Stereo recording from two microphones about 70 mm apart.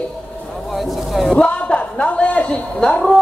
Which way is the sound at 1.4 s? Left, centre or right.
Centre.